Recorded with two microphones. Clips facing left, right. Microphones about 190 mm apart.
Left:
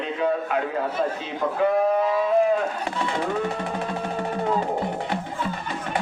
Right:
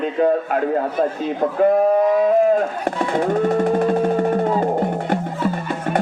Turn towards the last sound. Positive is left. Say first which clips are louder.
# right 6 dB
turn(degrees=-50)  # may be behind; listen again after turning